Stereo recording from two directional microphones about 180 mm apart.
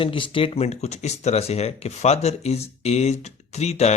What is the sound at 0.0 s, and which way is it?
Speech, 30° left (ahead or behind).